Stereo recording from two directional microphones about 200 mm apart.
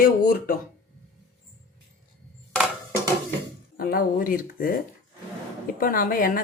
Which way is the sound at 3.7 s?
45° left (ahead or behind).